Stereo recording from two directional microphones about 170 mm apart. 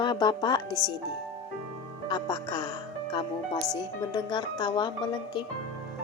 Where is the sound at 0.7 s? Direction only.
15° right (ahead or behind).